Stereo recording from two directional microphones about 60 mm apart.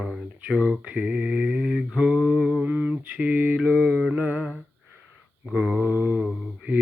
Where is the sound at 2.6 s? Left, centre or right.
Right.